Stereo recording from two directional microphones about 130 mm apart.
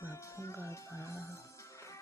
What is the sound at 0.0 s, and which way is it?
Music, 20° left (ahead or behind).